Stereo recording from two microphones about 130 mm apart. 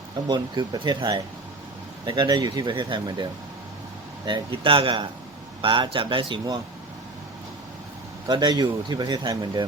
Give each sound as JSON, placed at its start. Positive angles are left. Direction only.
{"t": 0.3, "sound": "speech", "side_deg": -35}
{"t": 4.3, "sound": "speech", "side_deg": -40}
{"t": 8.3, "sound": "speech", "side_deg": -35}